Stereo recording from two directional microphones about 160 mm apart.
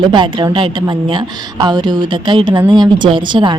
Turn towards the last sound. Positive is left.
turn(degrees=-30)  # may be behind; listen again after turning